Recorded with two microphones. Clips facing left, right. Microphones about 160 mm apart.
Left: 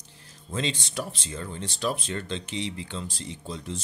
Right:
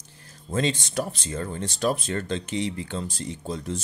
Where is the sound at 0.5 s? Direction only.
45° right (ahead or behind).